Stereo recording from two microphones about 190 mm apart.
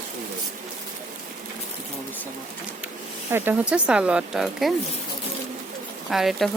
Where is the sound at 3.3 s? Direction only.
10° right (ahead or behind).